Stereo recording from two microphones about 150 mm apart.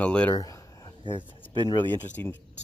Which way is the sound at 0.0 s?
10° left (ahead or behind).